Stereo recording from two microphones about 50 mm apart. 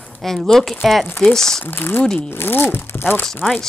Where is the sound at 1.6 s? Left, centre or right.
Left.